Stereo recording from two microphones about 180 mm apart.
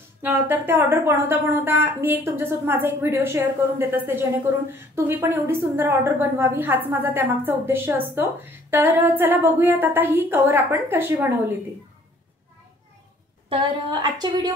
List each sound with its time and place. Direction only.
0.2 s a woman's voice: 10° right (ahead or behind)
13.5 s a woman's voice: 25° right (ahead or behind)